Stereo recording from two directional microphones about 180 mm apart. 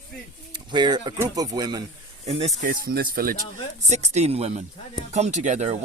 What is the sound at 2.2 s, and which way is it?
Speech, 35° right (ahead or behind).